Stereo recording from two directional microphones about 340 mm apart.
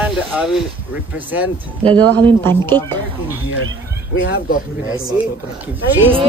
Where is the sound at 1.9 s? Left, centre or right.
Centre.